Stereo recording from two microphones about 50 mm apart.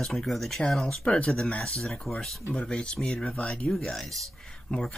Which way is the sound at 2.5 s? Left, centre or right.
Centre.